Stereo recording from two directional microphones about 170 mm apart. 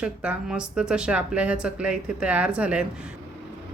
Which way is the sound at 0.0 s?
5° right (ahead or behind).